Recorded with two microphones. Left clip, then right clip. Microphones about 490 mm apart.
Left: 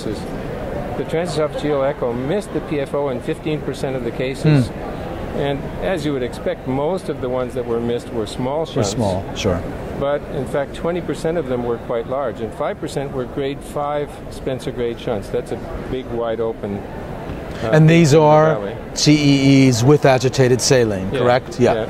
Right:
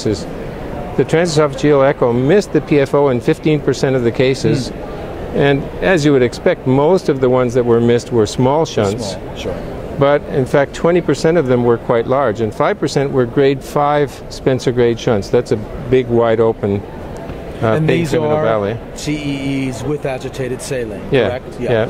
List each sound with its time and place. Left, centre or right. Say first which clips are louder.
1.1 s speech: right 6 dB; right
10.0 s speech: right 8 dB; right
17.7 s speech: left 7 dB; left